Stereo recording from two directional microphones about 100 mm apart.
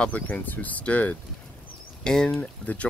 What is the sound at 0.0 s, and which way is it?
Speech, 15° left (ahead or behind).